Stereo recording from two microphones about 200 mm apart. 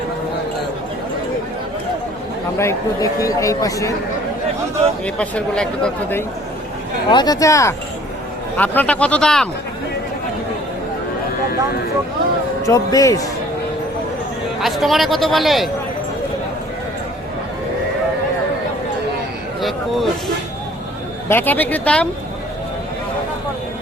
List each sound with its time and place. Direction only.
2.6 s speech: 15° left (ahead or behind)
5.0 s speech: 5° left (ahead or behind)
7.1 s speech: 20° left (ahead or behind); by 9.5 s 5° left (ahead or behind)
12.6 s speech: 15° left (ahead or behind)
14.6 s speech: centre (ahead or behind)
19.6 s speech: centre (ahead or behind)